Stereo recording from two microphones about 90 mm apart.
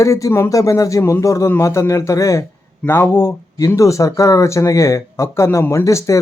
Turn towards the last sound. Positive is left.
turn(degrees=35)  # may be behind; listen again after turning